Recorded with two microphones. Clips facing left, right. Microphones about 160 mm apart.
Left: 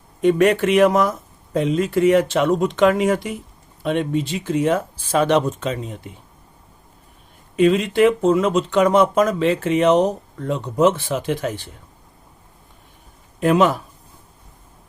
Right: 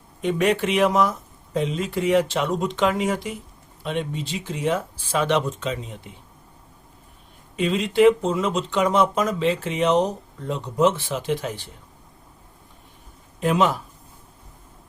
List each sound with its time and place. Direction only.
0.2 s speech: 50° left (ahead or behind)
7.5 s speech: 55° left (ahead or behind)
13.4 s speech: 55° left (ahead or behind)